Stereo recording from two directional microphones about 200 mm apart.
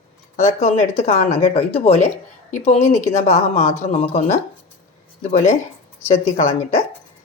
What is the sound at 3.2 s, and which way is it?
Speech, 35° left (ahead or behind).